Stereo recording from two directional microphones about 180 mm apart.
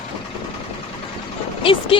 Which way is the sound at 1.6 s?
30° left (ahead or behind).